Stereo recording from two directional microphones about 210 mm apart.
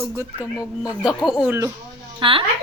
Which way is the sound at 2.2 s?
25° right (ahead or behind).